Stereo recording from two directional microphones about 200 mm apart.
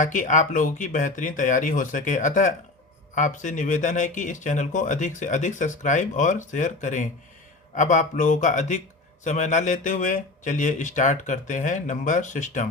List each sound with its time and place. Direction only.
0.0 s speech: 40° left (ahead or behind)